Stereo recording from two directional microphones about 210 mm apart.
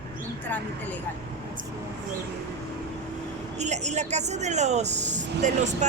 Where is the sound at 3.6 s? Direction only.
35° right (ahead or behind).